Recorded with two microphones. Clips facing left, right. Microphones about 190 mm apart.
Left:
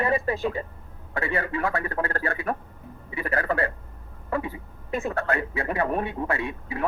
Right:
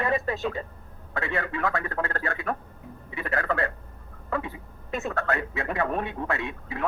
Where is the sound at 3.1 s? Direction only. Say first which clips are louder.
Left 2 dB; 15° left (ahead or behind).